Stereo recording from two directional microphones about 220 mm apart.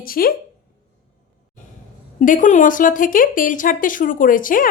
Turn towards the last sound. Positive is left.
turn(degrees=40)  # may be behind; listen again after turning